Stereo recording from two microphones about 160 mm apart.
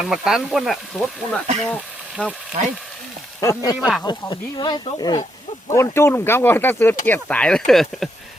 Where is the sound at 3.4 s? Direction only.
20° left (ahead or behind).